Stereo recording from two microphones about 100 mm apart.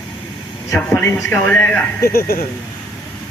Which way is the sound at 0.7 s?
15° left (ahead or behind).